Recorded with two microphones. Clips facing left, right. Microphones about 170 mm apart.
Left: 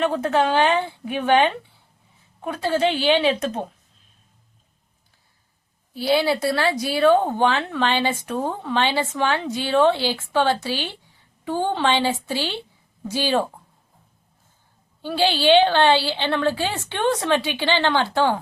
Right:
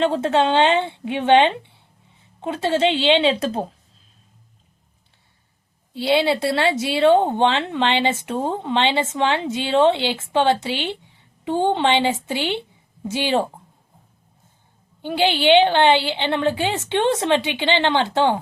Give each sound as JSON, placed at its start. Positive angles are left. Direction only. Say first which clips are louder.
{"t": 0.0, "sound": "speech", "louder": "right 2 dB", "side_deg": -25}
{"t": 5.9, "sound": "speech", "louder": "right 1 dB", "side_deg": -25}
{"t": 15.0, "sound": "speech", "louder": "right 1 dB", "side_deg": -20}